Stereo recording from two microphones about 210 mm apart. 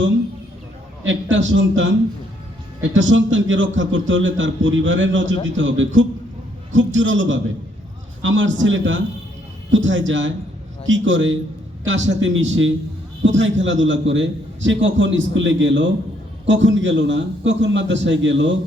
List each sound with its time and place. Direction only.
1.0 s a man's voice: 65° right (ahead or behind)